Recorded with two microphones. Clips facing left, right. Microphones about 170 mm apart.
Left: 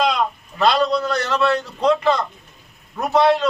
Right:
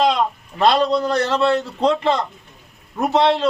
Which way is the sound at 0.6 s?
25° right (ahead or behind).